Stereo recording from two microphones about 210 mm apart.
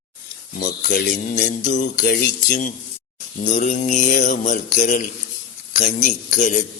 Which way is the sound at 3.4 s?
35° left (ahead or behind).